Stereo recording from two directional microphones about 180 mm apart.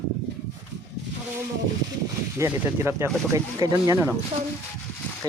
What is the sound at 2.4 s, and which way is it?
Speech, 15° right (ahead or behind).